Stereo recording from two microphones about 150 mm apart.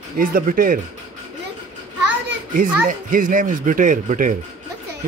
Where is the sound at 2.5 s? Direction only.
65° right (ahead or behind).